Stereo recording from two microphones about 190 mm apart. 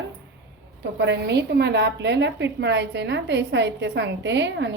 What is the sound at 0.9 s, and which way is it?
A woman's voice, 65° right (ahead or behind).